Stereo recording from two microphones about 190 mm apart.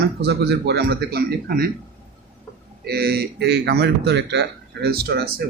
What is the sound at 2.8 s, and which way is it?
A man's voice, 55° right (ahead or behind).